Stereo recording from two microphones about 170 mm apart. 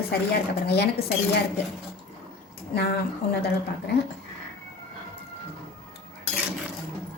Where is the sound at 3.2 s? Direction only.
70° left (ahead or behind).